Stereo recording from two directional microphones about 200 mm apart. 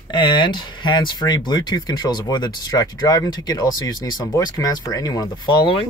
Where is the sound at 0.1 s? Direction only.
20° left (ahead or behind).